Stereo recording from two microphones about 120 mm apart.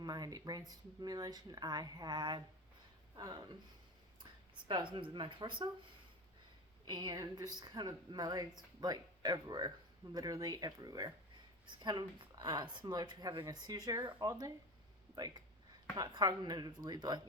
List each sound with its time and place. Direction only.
0.0 s a woman's voice: 35° right (ahead or behind)
4.7 s a woman's voice: 45° right (ahead or behind)
6.8 s a woman's voice: 35° right (ahead or behind)
14.3 s speech: 25° right (ahead or behind)
16.0 s a woman's voice: 35° right (ahead or behind)